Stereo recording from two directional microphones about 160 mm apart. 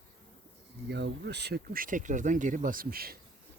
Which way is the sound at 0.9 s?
90° right.